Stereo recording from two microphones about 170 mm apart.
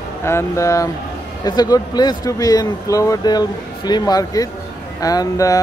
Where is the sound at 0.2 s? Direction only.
15° left (ahead or behind).